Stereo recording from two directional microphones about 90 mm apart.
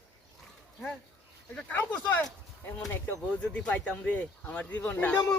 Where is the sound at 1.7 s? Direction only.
20° left (ahead or behind).